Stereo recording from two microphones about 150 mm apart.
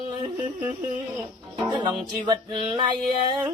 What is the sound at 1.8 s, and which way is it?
Music, 30° right (ahead or behind).